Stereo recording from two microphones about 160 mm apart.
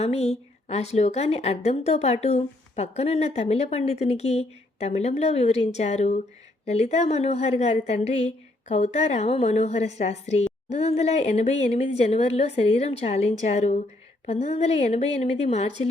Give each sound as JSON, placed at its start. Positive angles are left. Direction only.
{"t": 0.0, "sound": "a woman's voice", "side_deg": 40}